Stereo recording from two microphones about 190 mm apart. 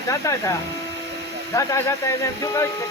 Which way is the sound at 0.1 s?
15° left (ahead or behind).